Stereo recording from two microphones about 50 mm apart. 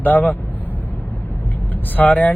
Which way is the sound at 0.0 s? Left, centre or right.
Left.